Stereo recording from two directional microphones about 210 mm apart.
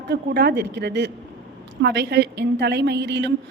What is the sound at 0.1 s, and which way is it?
A woman's voice, 50° right (ahead or behind).